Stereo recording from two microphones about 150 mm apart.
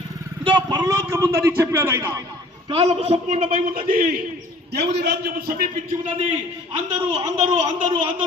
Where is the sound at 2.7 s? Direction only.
45° right (ahead or behind).